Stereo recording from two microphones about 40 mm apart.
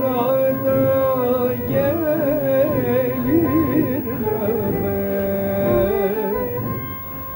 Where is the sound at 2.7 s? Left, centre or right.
Centre.